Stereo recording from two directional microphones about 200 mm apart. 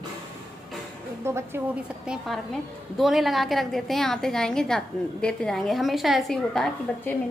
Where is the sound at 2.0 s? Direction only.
Centre (ahead or behind).